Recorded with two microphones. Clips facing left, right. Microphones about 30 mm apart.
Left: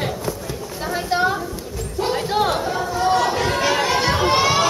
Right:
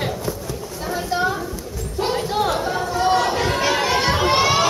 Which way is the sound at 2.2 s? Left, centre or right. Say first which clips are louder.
Left 3 dB; centre.